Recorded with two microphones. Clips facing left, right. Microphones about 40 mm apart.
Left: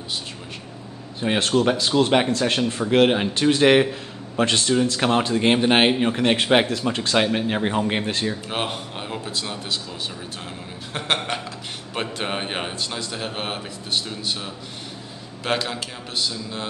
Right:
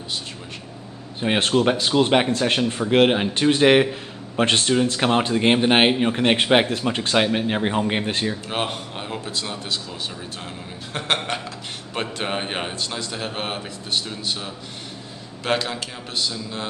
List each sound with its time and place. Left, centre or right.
1.2 s speech: centre
4.4 s speech: right; by 6.2 s centre
6.2 s speech: centre
7.2 s speech: centre
8.5 s speech: centre
10.9 s speech: centre